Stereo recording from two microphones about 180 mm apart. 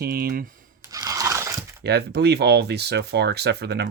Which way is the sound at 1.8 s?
65° right (ahead or behind).